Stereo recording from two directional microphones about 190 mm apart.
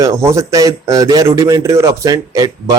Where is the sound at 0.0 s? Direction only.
15° right (ahead or behind).